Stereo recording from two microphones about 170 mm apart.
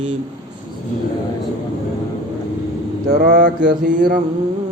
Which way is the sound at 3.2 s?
55° right (ahead or behind).